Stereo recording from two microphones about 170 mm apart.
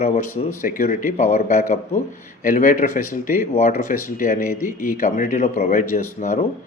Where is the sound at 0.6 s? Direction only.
50° left (ahead or behind).